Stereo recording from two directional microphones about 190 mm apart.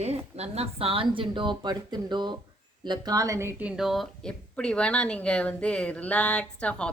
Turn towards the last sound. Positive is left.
turn(degrees=5)  # may be behind; listen again after turning